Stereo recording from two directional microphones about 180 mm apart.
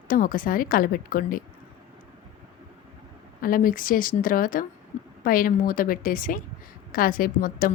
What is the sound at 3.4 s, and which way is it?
A woman's voice, 50° left (ahead or behind).